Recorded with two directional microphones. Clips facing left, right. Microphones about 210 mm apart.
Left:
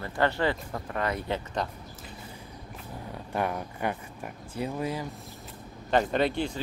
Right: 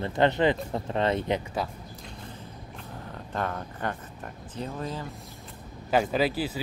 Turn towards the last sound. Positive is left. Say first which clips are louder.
# even
turn(degrees=-5)  # may be behind; listen again after turning